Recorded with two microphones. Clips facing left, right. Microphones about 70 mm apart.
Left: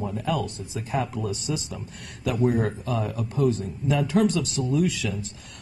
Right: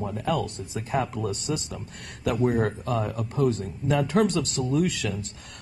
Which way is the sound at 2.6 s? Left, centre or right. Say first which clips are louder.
Right 1 dB; right.